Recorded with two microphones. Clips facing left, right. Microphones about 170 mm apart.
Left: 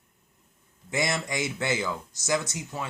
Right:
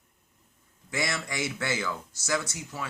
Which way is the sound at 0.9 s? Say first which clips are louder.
Left 3 dB; 20° left (ahead or behind).